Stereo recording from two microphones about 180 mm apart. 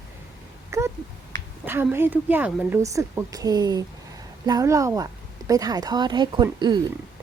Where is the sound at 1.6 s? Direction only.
10° right (ahead or behind).